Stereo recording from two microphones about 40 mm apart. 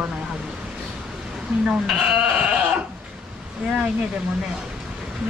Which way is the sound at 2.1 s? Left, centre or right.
Right.